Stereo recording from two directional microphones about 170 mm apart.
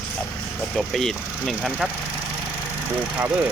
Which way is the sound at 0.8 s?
Centre (ahead or behind).